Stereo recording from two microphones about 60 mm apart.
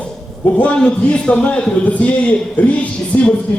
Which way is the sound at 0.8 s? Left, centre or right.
Centre.